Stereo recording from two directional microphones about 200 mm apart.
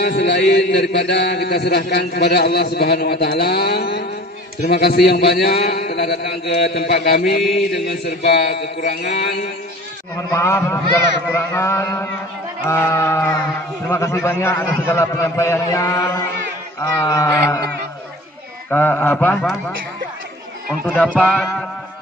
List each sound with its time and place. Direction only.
0.0 s a man's voice: 55° left (ahead or behind)
7.4 s mantra: centre (ahead or behind)
8.2 s a man's voice: 55° left (ahead or behind)
10.3 s a man's voice: 15° left (ahead or behind)
20.8 s a man's voice: 5° left (ahead or behind)